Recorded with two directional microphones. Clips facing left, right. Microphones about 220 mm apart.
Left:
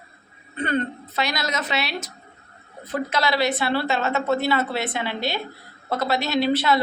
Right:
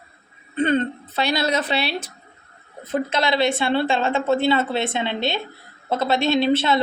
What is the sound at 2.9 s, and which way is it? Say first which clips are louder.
A woman's voice: right 2 dB; 25° right (ahead or behind).